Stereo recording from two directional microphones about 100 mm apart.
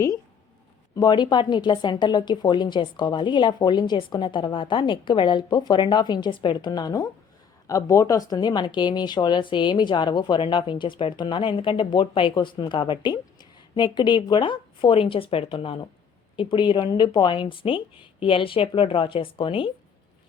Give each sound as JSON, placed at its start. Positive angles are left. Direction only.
{"t": 0.9, "sound": "a woman's voice", "side_deg": 45}
{"t": 6.7, "sound": "a woman's voice", "side_deg": 40}